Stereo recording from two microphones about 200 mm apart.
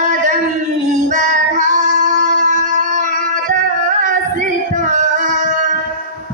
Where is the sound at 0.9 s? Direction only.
40° right (ahead or behind).